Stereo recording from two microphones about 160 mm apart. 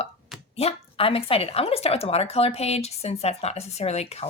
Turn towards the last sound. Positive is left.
turn(degrees=40)  # may be behind; listen again after turning